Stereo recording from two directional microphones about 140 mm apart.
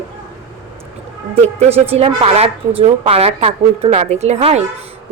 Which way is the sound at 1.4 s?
45° right (ahead or behind).